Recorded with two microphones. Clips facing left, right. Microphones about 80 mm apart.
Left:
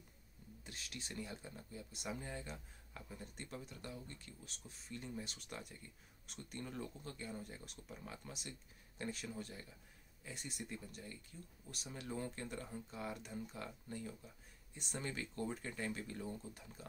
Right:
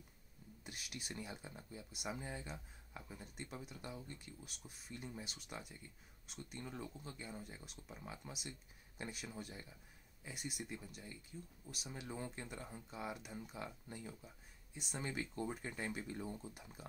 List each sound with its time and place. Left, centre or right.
0.7 s speech: centre
14.2 s speech: centre
15.0 s speech: centre